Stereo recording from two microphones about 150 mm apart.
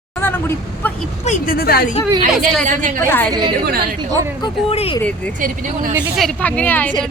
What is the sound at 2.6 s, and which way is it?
Speech, 60° right (ahead or behind).